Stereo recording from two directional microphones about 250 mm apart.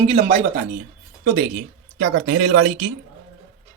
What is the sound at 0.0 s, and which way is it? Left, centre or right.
Speech, right.